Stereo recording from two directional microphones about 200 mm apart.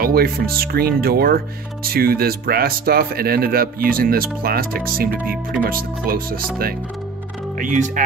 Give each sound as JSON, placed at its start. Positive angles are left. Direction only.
{"t": 0.0, "sound": "speech", "side_deg": -50}